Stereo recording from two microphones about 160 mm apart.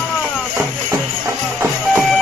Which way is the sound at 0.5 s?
15° right (ahead or behind).